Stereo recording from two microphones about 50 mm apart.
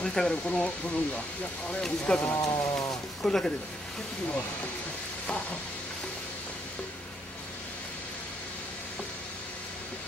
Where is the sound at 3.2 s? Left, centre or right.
Centre.